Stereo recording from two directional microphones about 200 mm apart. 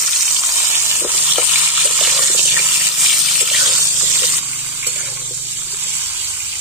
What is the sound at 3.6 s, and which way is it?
Water, 15° right (ahead or behind).